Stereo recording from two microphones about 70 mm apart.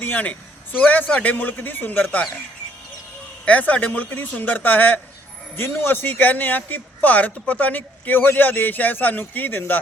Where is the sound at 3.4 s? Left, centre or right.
Left.